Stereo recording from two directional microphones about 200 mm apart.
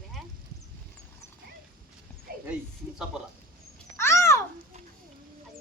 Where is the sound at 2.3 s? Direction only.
50° right (ahead or behind).